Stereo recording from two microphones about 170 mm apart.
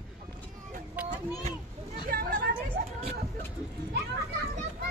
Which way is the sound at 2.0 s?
60° right (ahead or behind).